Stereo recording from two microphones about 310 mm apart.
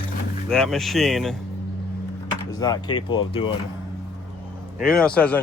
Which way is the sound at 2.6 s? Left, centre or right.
Centre.